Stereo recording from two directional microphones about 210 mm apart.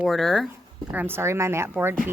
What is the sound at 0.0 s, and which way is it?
Speech, centre (ahead or behind).